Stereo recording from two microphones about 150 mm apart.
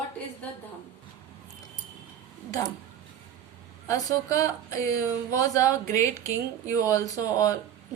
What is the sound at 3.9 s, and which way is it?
A woman's voice, 25° left (ahead or behind).